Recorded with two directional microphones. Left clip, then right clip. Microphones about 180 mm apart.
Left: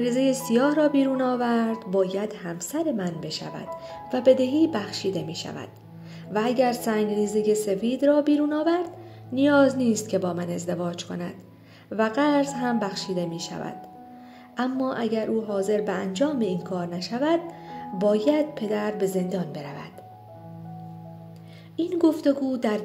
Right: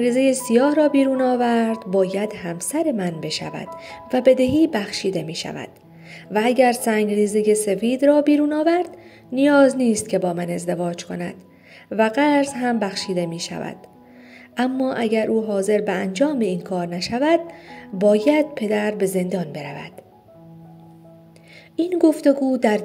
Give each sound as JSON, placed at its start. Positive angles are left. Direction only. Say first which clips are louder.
{"t": 0.0, "sound": "a woman's voice", "louder": "right 5 dB", "side_deg": -10}
{"t": 21.7, "sound": "speech", "louder": "right 5 dB", "side_deg": -20}